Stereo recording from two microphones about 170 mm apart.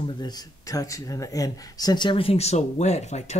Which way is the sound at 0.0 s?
25° left (ahead or behind).